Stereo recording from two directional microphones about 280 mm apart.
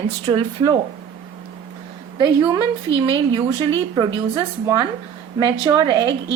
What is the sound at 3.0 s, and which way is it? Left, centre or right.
Speech, centre.